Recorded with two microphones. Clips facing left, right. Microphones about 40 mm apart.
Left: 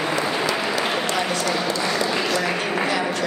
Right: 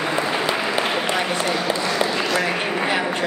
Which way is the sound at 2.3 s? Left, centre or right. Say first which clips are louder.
Right 1 dB; right.